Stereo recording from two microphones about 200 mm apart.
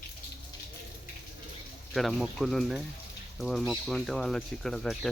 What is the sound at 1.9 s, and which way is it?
Speech, centre (ahead or behind).